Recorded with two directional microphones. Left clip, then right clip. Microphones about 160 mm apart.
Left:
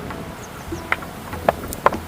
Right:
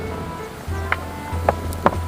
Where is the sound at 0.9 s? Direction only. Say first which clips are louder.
Even; 35° left (ahead or behind).